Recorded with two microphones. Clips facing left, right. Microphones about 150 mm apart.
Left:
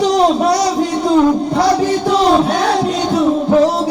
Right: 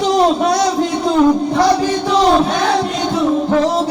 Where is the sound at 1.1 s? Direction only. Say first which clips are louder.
Even; 5° left (ahead or behind).